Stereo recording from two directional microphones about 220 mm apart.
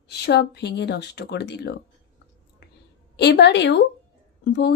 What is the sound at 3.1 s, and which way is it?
A woman's voice, 50° left (ahead or behind).